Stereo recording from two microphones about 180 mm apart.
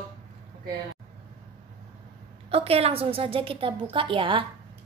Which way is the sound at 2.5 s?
35° right (ahead or behind).